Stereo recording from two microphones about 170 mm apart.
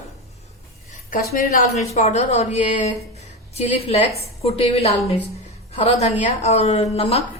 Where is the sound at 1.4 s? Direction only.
45° left (ahead or behind).